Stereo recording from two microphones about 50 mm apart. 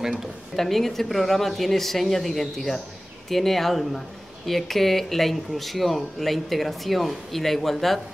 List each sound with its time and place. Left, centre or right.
0.6 s speech: centre